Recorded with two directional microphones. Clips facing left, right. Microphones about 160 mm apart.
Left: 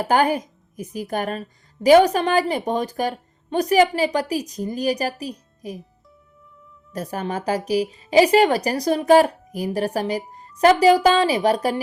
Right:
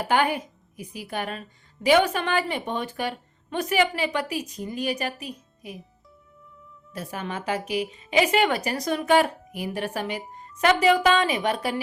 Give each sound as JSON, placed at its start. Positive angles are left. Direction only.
{"t": 0.0, "sound": "a woman's voice", "side_deg": 40}
{"t": 6.9, "sound": "a woman's voice", "side_deg": 40}